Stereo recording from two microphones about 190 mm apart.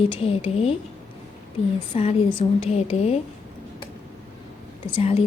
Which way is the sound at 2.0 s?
35° left (ahead or behind).